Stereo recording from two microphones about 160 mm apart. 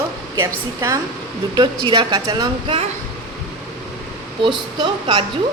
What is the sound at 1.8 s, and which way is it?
Speech, 30° right (ahead or behind).